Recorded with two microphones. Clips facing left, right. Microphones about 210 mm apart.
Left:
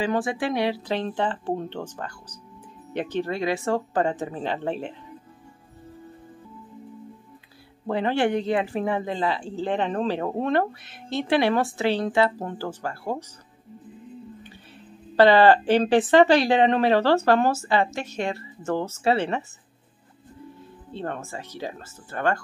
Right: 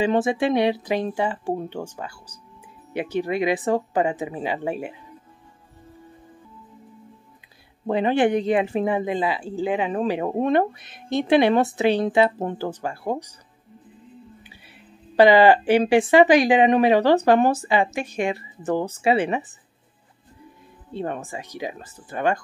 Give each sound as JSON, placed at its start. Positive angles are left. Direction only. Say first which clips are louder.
{"t": 0.0, "sound": "speech", "louder": "right 4 dB", "side_deg": -20}
{"t": 7.8, "sound": "speech", "louder": "right 3 dB", "side_deg": -20}
{"t": 15.1, "sound": "speech", "louder": "right 2 dB", "side_deg": -15}
{"t": 20.9, "sound": "speech", "louder": "right 3 dB", "side_deg": -15}